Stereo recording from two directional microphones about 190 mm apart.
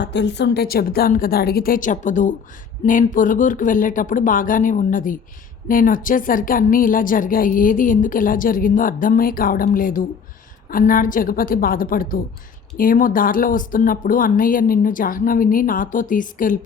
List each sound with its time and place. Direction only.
0.0 s speech: 65° left (ahead or behind); by 16.6 s 45° left (ahead or behind)